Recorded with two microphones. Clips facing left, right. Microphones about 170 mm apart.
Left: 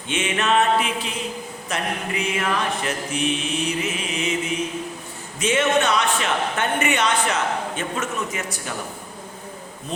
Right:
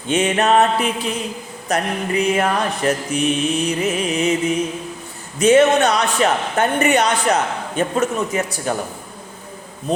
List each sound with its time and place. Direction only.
0.1 s a woman's voice: 40° right (ahead or behind)
5.4 s a woman's voice: 40° right (ahead or behind)